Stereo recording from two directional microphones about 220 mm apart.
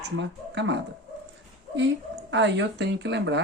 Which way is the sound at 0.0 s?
55° right (ahead or behind).